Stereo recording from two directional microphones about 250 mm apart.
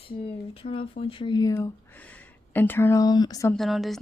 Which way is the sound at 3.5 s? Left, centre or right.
Centre.